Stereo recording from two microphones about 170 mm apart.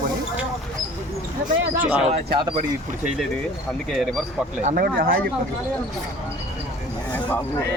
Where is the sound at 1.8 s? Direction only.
10° right (ahead or behind).